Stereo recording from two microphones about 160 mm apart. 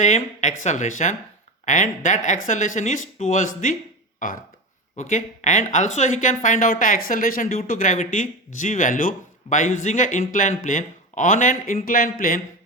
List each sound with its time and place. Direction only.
0.0 s speech: 50° left (ahead or behind)
4.9 s speech: 50° left (ahead or behind)